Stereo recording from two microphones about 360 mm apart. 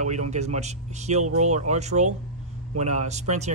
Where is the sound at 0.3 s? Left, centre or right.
Centre.